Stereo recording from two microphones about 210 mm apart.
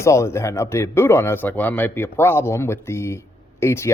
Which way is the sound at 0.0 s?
15° left (ahead or behind).